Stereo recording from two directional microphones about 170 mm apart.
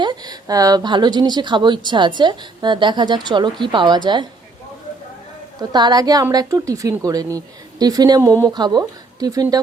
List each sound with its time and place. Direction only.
0.0 s a woman's voice: 25° right (ahead or behind)
5.5 s a woman's voice: 25° right (ahead or behind)